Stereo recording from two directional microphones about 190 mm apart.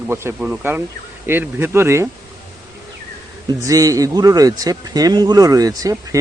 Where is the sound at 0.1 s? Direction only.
15° right (ahead or behind).